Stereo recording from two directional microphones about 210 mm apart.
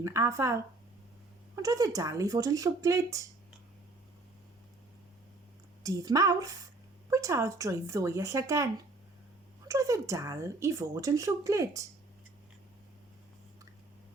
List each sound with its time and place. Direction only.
0.0 s speech: 15° right (ahead or behind)
1.6 s speech: 15° right (ahead or behind)
5.8 s speech: 15° right (ahead or behind)